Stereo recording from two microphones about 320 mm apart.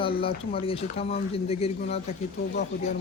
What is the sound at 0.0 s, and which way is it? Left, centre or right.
Speech, centre.